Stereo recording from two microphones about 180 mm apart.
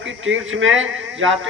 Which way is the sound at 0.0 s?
90° right.